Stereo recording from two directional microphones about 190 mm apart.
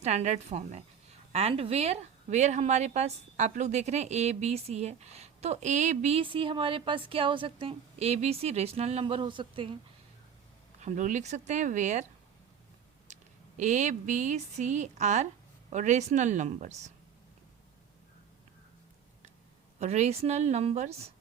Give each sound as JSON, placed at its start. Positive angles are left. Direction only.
{"t": 0.0, "sound": "speech", "side_deg": -35}
{"t": 10.8, "sound": "speech", "side_deg": -40}
{"t": 13.6, "sound": "speech", "side_deg": -40}
{"t": 19.8, "sound": "speech", "side_deg": -35}